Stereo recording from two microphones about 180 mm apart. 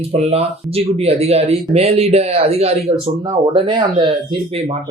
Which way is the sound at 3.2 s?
25° right (ahead or behind).